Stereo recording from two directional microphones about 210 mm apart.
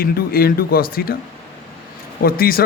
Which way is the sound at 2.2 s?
45° left (ahead or behind).